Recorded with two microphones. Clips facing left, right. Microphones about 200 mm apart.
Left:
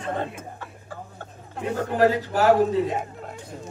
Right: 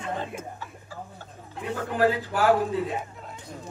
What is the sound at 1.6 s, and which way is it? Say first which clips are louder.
Speech: left 3 dB; 40° left (ahead or behind).